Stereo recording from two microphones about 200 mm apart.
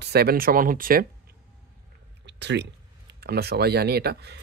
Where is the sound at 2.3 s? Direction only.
60° right (ahead or behind).